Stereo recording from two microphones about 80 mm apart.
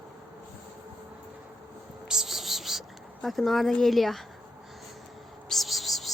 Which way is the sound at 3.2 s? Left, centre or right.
Centre.